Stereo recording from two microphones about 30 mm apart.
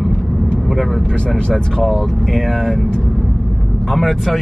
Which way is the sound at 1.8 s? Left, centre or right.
Centre.